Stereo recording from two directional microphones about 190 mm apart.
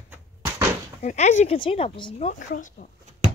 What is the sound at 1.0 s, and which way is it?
Speech, 40° left (ahead or behind).